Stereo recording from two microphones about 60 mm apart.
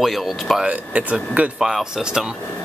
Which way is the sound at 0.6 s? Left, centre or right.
Right.